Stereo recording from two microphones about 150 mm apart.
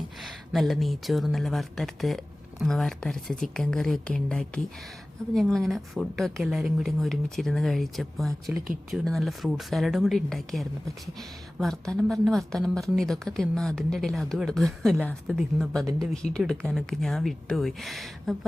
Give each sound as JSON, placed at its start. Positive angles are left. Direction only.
{"t": 0.2, "sound": "speech", "side_deg": 0}
{"t": 8.5, "sound": "speech", "side_deg": -10}
{"t": 8.9, "sound": "speech", "side_deg": 0}